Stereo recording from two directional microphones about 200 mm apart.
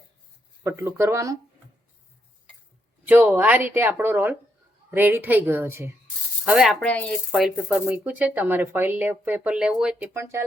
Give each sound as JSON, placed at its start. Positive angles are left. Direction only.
{"t": 0.6, "sound": "speech", "side_deg": -10}
{"t": 3.1, "sound": "speech", "side_deg": -10}